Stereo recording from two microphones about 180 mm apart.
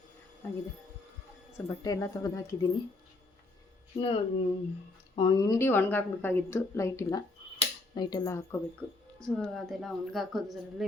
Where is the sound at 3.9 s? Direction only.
30° left (ahead or behind); by 8.5 s 15° left (ahead or behind).